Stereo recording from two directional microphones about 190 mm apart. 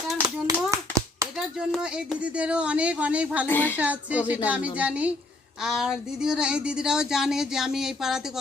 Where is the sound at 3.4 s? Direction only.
10° left (ahead or behind).